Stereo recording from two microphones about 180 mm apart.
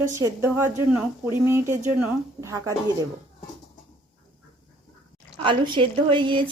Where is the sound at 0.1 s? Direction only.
15° right (ahead or behind).